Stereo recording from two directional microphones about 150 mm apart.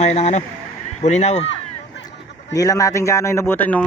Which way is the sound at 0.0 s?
45° left (ahead or behind).